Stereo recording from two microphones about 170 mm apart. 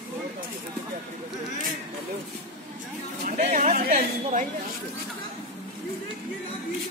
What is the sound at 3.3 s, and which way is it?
Speech, 45° right (ahead or behind).